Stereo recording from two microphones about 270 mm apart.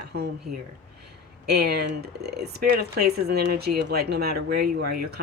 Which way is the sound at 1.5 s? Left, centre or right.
Right.